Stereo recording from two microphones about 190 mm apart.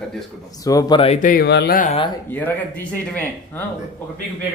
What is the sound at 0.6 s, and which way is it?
Speech, 20° left (ahead or behind).